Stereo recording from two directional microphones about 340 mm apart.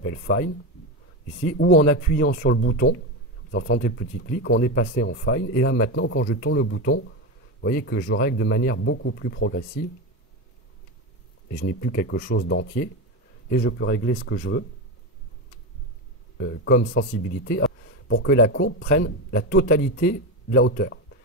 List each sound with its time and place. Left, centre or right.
0.0 s speech: left
11.8 s speech: left
16.3 s speech: left